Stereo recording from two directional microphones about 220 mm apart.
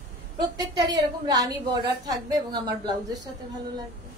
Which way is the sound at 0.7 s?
20° right (ahead or behind).